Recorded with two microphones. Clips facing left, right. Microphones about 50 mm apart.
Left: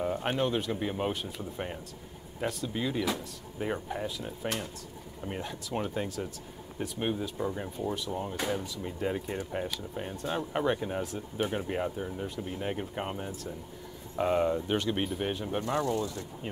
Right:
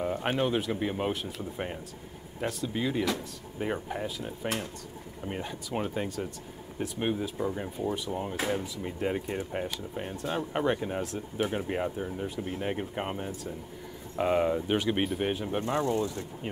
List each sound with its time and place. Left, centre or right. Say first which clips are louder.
0.0 s speech: right 1 dB; centre